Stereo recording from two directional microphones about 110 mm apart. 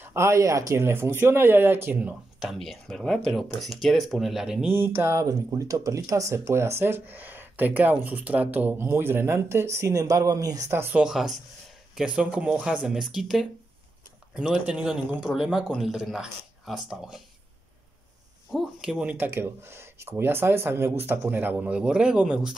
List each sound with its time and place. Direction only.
0.0 s speech: 25° right (ahead or behind)
2.4 s speech: centre (ahead or behind)
4.7 s speech: 20° right (ahead or behind)
11.0 s speech: 5° right (ahead or behind)
18.5 s speech: 5° right (ahead or behind)